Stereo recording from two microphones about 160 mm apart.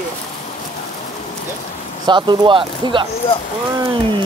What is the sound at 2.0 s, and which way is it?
Speech, 30° right (ahead or behind).